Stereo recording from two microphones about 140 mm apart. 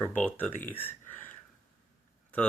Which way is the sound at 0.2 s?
10° left (ahead or behind).